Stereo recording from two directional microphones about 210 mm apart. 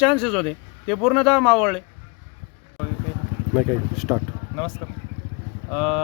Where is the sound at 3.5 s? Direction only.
Centre (ahead or behind).